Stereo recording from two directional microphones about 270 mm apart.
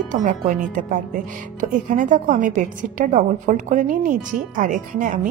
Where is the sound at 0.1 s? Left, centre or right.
Right.